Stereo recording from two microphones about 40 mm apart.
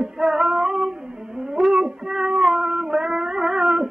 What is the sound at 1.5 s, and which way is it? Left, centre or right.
Cat, centre.